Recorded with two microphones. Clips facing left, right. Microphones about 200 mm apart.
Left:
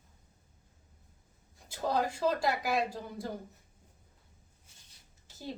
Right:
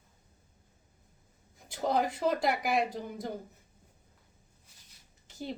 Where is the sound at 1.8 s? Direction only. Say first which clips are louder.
Right 1 dB; 20° right (ahead or behind).